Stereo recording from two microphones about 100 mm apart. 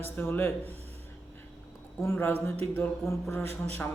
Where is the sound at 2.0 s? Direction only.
25° left (ahead or behind).